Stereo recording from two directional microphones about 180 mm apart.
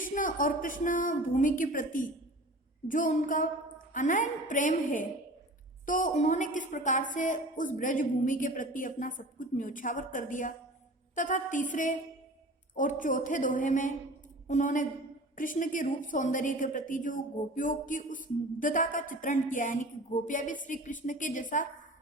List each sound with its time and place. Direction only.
0.0 s a woman's voice: 45° left (ahead or behind)